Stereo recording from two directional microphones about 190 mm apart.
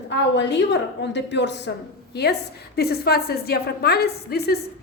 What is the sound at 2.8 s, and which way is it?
A woman's voice, 55° left (ahead or behind).